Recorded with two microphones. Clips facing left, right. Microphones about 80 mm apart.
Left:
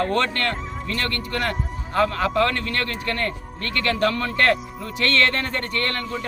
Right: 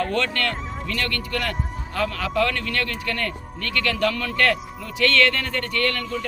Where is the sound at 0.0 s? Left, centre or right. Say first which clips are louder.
Left 2 dB; left.